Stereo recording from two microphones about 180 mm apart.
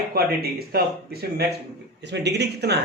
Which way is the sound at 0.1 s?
60° right (ahead or behind).